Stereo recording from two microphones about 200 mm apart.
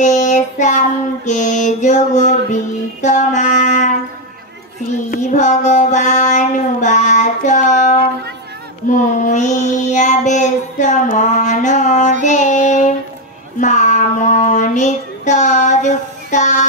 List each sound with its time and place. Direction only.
0.0 s child singing: 35° left (ahead or behind)
5.1 s child singing: 35° left (ahead or behind)
9.1 s child singing: 40° left (ahead or behind)